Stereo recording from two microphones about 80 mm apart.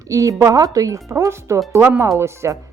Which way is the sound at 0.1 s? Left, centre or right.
Right.